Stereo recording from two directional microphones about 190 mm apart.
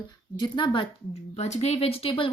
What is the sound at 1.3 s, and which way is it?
Speech, 35° left (ahead or behind).